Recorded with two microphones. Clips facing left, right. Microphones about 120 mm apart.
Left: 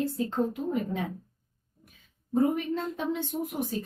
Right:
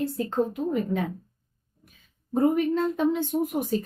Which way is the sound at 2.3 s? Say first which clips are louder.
Right 4 dB; 55° right (ahead or behind).